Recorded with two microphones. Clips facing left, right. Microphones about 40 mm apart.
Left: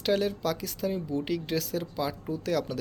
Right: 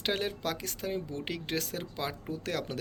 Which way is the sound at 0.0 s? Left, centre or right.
Right.